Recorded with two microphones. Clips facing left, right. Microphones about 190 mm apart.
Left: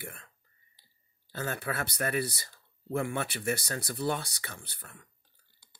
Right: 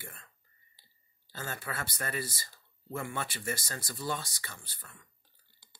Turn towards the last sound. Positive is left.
turn(degrees=55)  # may be behind; listen again after turning